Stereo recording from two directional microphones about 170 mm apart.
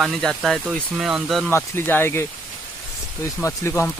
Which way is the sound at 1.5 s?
15° left (ahead or behind).